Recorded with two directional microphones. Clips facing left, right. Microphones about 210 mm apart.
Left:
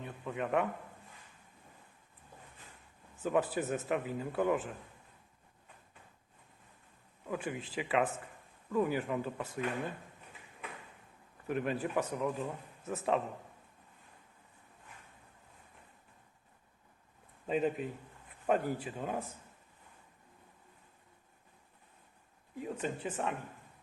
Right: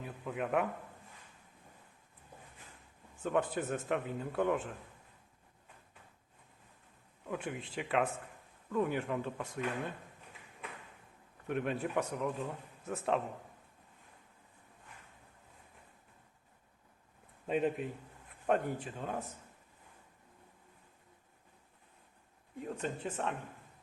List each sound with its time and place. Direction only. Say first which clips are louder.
0.0 s a man's voice: even; 5° right (ahead or behind)
3.2 s a man's voice: left 1 dB; 5° left (ahead or behind)
7.3 s a man's voice: left 1 dB; centre (ahead or behind)
11.4 s a man's voice: left 1 dB; centre (ahead or behind)
17.4 s a man's voice: even; centre (ahead or behind)
22.5 s a man's voice: left 1 dB; 5° left (ahead or behind)